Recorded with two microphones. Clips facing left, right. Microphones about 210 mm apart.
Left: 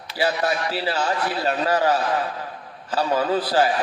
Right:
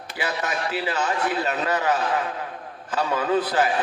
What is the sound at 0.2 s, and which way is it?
A man's voice, 35° left (ahead or behind).